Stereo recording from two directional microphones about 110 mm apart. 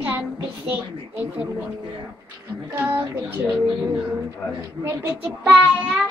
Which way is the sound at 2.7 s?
15° right (ahead or behind).